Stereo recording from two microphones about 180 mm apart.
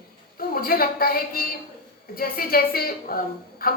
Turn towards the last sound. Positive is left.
turn(degrees=55)  # may be behind; listen again after turning